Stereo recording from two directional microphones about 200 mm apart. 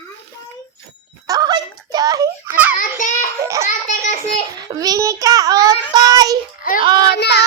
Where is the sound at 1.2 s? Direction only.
20° right (ahead or behind).